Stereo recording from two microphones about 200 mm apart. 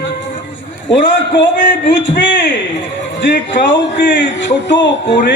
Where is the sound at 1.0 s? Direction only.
65° left (ahead or behind).